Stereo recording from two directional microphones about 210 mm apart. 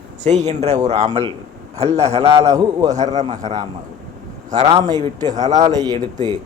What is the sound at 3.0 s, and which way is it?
Speech, 35° right (ahead or behind).